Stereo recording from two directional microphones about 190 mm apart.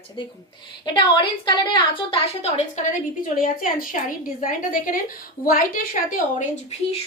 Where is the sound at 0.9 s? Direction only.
25° left (ahead or behind).